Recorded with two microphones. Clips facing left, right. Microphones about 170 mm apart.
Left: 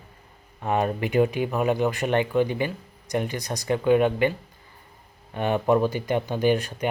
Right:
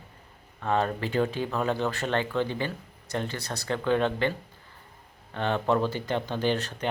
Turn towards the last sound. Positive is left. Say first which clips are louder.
# left 5 dB
turn(degrees=10)  # may be behind; listen again after turning